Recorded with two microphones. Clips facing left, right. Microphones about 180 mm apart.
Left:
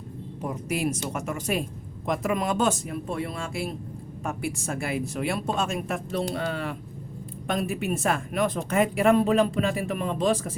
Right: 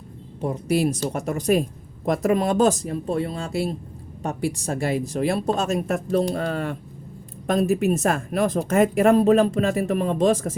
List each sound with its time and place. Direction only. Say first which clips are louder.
0.4 s speech: right 6 dB; 35° right (ahead or behind)